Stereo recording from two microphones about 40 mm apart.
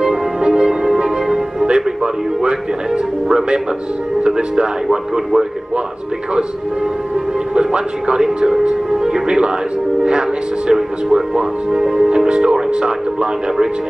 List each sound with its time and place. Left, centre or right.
0.0 s music: centre
2.4 s speech: centre
7.5 s speech: right
10.7 s speech: centre